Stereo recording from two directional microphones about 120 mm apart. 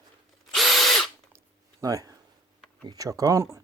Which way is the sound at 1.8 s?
30° right (ahead or behind).